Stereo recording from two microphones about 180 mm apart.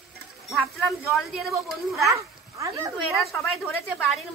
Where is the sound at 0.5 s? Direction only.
Centre (ahead or behind).